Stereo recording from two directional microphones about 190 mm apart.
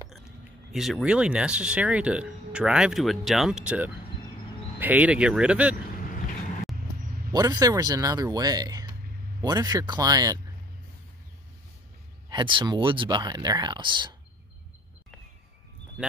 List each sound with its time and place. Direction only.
0.7 s speech: centre (ahead or behind)
7.3 s speech: 20° right (ahead or behind)
12.3 s speech: 25° right (ahead or behind)